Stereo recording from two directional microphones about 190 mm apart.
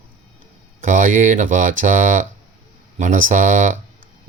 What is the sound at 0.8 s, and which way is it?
Speech, 45° right (ahead or behind).